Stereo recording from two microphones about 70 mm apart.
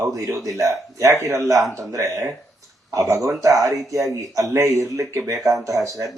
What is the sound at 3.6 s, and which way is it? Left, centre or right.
Speech, right.